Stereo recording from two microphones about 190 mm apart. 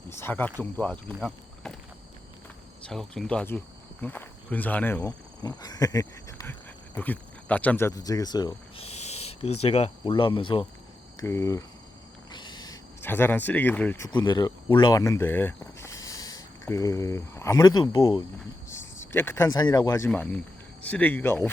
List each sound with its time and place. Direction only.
0.1 s speech: 10° left (ahead or behind)
2.8 s speech: centre (ahead or behind)
5.4 s speech: 20° left (ahead or behind)
11.2 s speech: 15° left (ahead or behind)
20.1 s speech: 10° left (ahead or behind)